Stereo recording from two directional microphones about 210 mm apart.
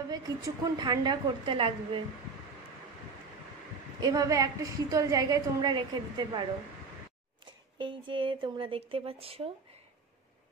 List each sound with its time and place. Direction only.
0.1 s speech: 20° right (ahead or behind)
4.0 s a woman's voice: 15° right (ahead or behind)
7.8 s speech: 25° right (ahead or behind)